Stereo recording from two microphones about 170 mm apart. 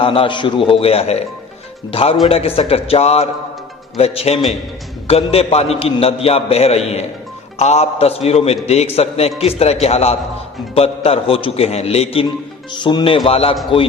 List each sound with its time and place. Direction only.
0.0 s a man's voice: 30° left (ahead or behind)